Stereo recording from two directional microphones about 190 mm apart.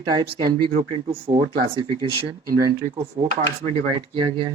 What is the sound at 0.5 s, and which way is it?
Speech, 30° right (ahead or behind).